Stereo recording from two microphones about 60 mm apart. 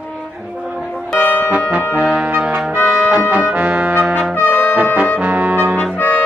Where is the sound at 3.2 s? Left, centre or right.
Centre.